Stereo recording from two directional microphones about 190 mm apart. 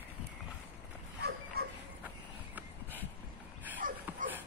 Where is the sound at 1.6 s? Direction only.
55° right (ahead or behind).